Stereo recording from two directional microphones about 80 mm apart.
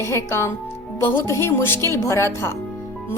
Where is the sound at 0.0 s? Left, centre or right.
Left.